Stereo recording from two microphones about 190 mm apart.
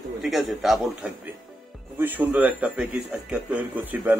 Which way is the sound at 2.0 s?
10° right (ahead or behind).